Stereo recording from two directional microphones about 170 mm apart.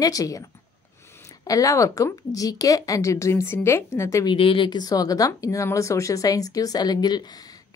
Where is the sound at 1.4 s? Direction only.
20° left (ahead or behind).